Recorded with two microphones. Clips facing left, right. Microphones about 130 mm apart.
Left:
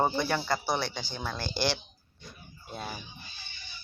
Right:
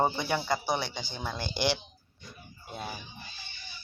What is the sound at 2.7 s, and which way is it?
Speech, 5° right (ahead or behind).